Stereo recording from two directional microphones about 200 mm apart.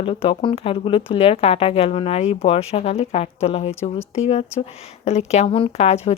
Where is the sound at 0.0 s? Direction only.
25° left (ahead or behind).